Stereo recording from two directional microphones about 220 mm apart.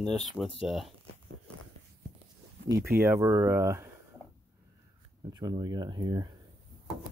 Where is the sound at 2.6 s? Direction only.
55° right (ahead or behind).